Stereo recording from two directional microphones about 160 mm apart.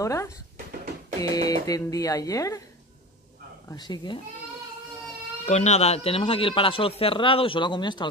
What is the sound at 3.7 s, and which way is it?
Speech, 25° left (ahead or behind).